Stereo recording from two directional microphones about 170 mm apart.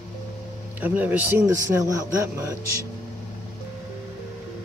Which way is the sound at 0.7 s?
10° right (ahead or behind).